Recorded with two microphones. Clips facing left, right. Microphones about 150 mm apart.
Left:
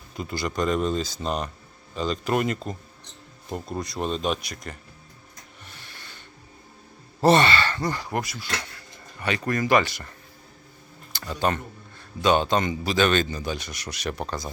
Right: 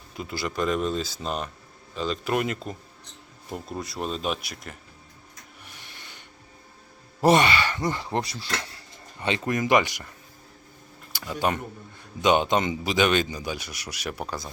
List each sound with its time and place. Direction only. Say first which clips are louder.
0.2 s speech: left 1 dB; centre (ahead or behind)
5.6 s a sound: left 1 dB; 15° right (ahead or behind)
7.2 s speech: left 1 dB; 10° right (ahead or behind)
11.1 s speech: left 1 dB; 10° right (ahead or behind)